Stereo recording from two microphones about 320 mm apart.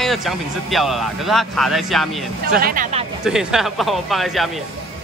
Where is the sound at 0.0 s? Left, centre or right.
Centre.